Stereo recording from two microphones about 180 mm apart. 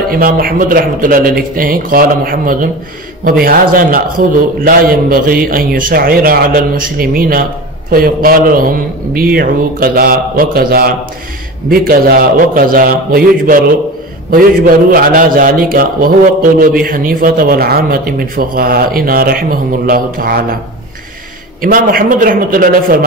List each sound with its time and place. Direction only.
0.1 s a man's voice: 55° right (ahead or behind)
21.5 s a man's voice: 55° right (ahead or behind)